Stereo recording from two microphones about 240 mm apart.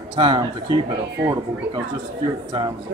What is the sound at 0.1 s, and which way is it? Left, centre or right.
Speech, right.